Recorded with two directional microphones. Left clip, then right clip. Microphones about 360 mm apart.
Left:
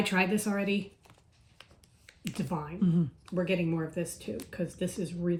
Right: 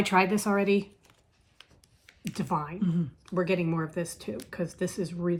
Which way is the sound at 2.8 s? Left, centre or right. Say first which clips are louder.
Left 1 dB; centre.